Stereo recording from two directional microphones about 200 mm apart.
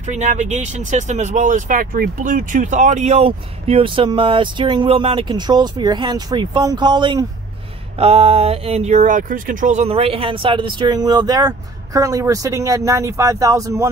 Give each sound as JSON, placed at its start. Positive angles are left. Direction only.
{"t": 0.0, "sound": "speech", "side_deg": -35}